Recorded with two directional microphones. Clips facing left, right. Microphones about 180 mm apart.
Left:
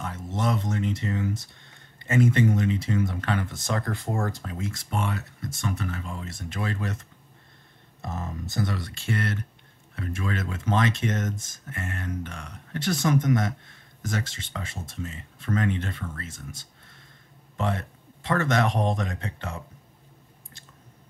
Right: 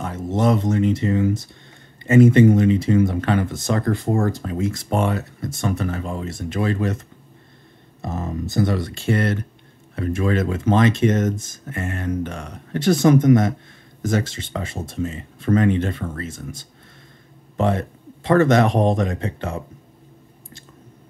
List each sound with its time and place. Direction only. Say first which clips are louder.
0.4 s speech: right 9 dB; 20° right (ahead or behind)
4.9 s speech: right 8 dB; 35° right (ahead or behind)
6.2 s speech: right 9 dB; 15° right (ahead or behind)
8.0 s speech: right 7 dB; 20° right (ahead or behind)
10.8 s speech: right 9 dB; 10° right (ahead or behind); by 12.5 s 30° right (ahead or behind)
13.0 s speech: right 9 dB; 15° right (ahead or behind)
17.6 s speech: right 8 dB; 20° right (ahead or behind)
18.7 s speech: right 8 dB; 45° right (ahead or behind)
18.9 s speech: right 9 dB; 15° right (ahead or behind)